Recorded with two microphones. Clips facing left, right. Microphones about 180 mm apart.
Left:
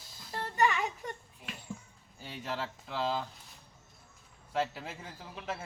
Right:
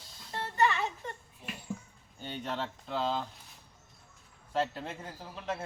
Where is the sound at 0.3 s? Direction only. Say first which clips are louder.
Even; 15° left (ahead or behind).